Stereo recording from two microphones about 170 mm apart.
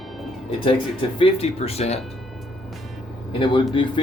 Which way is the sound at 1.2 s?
35° left (ahead or behind).